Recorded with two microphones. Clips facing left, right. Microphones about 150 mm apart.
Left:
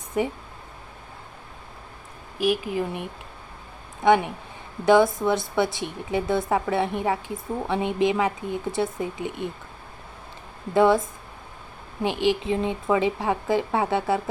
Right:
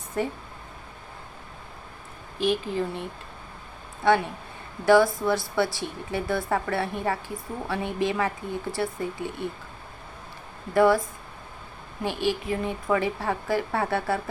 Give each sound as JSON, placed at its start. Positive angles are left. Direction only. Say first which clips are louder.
{"t": 0.1, "sound": "speech", "louder": "left 3 dB", "side_deg": 15}
{"t": 2.4, "sound": "speech", "louder": "left 1 dB", "side_deg": 10}
{"t": 10.8, "sound": "speech", "louder": "left 1 dB", "side_deg": 20}
{"t": 12.0, "sound": "speech", "louder": "left 4 dB", "side_deg": 20}